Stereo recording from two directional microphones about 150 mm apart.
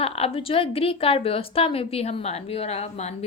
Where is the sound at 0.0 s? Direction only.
40° left (ahead or behind).